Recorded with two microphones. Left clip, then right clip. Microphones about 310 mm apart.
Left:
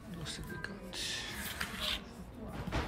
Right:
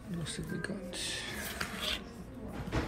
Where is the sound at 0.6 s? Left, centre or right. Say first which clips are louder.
Right 1 dB; centre.